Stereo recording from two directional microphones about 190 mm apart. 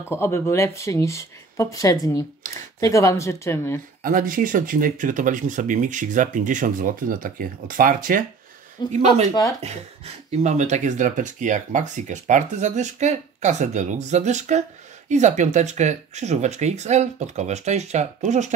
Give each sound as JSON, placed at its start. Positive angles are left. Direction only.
{"t": 0.1, "sound": "speech", "side_deg": 15}
{"t": 4.0, "sound": "speech", "side_deg": -45}
{"t": 8.8, "sound": "speech", "side_deg": 20}
{"t": 9.6, "sound": "speech", "side_deg": -35}